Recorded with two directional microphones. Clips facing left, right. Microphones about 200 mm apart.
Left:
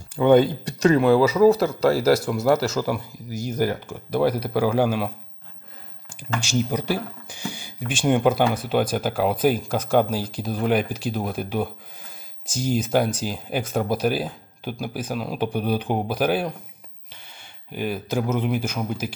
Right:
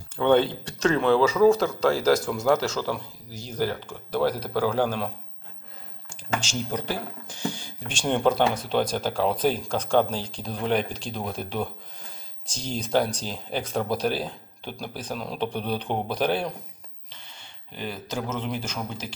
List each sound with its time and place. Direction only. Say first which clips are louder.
0.2 s speech: left 4 dB; 10° left (ahead or behind)
6.1 s speech: left 5 dB; 10° left (ahead or behind)